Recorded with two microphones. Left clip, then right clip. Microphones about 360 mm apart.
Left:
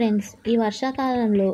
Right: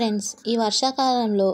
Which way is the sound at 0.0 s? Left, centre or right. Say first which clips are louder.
Left 1 dB; left.